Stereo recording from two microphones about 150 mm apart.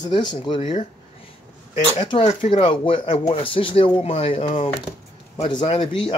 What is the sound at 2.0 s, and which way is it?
Speech, 40° left (ahead or behind).